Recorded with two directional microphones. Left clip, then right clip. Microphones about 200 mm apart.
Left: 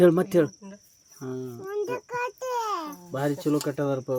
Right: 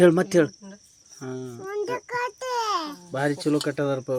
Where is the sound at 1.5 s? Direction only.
25° right (ahead or behind).